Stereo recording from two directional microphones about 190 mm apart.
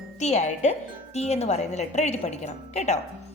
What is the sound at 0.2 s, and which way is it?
Speech, 35° left (ahead or behind).